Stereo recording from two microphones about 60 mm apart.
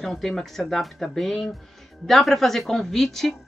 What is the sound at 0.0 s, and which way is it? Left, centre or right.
Speech, centre.